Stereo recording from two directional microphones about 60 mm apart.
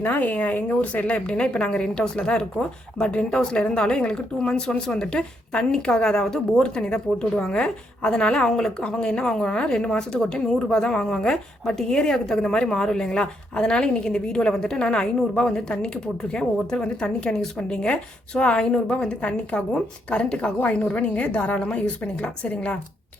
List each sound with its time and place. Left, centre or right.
0.0 s a woman's voice: left